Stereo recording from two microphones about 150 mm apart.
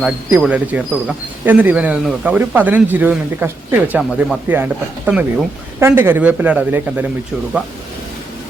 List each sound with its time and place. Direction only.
0.0 s speech: 5° right (ahead or behind)